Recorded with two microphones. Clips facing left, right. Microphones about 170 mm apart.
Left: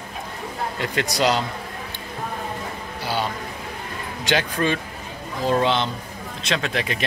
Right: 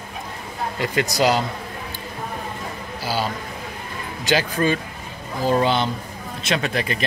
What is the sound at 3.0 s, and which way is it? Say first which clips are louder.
A man's voice: right 1 dB; centre (ahead or behind).